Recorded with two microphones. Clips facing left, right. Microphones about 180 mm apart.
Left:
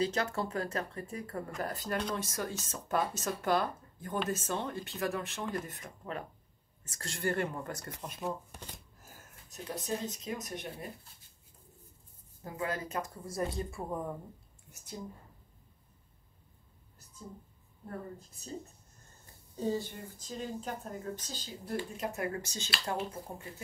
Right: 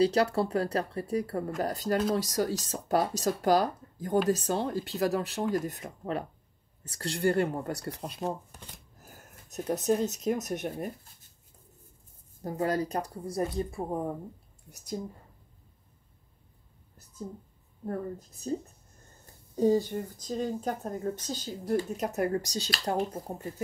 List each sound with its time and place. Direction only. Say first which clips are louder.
0.0 s speech: right 8 dB; 35° right (ahead or behind)
9.1 s speech: right 12 dB; 45° right (ahead or behind)
12.4 s speech: right 8 dB; 40° right (ahead or behind)
13.8 s speech: right 2 dB; 35° right (ahead or behind)
17.8 s speech: right 8 dB; 40° right (ahead or behind)
19.5 s a woman's voice: right 9 dB; 40° right (ahead or behind)